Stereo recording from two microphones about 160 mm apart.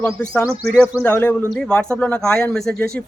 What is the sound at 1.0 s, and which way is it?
A man's voice, 10° left (ahead or behind).